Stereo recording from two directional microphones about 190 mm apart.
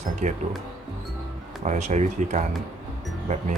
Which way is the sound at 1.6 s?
40° right (ahead or behind).